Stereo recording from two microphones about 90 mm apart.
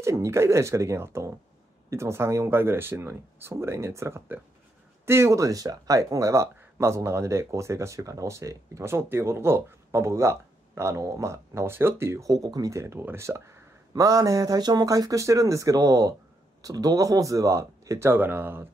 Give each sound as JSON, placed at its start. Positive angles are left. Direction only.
{"t": 0.0, "sound": "speech", "side_deg": -35}
{"t": 12.3, "sound": "speech", "side_deg": -45}